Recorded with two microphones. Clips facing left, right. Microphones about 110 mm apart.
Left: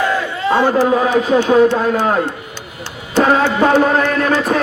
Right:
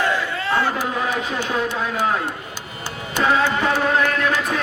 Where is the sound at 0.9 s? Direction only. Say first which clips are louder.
Left 10 dB; 50° left (ahead or behind).